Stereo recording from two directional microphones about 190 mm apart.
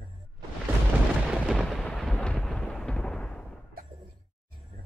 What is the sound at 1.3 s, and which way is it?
Thunder, centre (ahead or behind).